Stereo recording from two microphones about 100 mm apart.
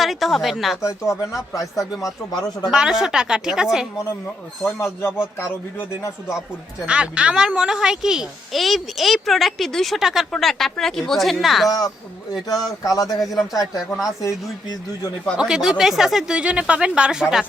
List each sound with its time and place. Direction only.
0.0 s a child's voice: centre (ahead or behind)
0.8 s speech: 30° left (ahead or behind)
1.8 s a child's voice: 5° right (ahead or behind)
2.0 s speech: 45° left (ahead or behind)
2.6 s speech: 5° right (ahead or behind)
4.6 s speech: 25° left (ahead or behind)
6.8 s a child's voice: 10° right (ahead or behind)
12.3 s speech: 40° left (ahead or behind)
13.2 s a child's voice: centre (ahead or behind)
14.2 s speech: 35° left (ahead or behind)
15.4 s speech: 5° right (ahead or behind)